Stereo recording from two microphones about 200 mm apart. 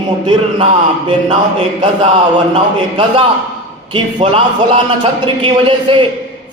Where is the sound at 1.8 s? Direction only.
25° right (ahead or behind).